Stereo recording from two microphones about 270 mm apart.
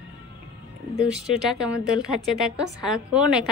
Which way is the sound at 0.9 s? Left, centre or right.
Centre.